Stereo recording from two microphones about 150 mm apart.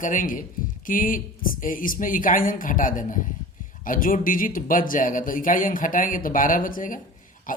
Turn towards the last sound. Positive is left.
turn(degrees=65)  # may be behind; listen again after turning